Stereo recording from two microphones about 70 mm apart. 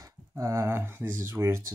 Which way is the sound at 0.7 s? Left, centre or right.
Right.